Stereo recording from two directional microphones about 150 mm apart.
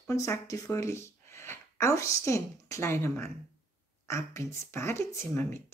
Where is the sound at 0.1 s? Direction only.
20° left (ahead or behind).